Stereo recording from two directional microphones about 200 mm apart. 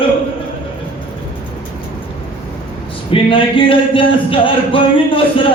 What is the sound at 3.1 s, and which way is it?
Speech, 25° left (ahead or behind).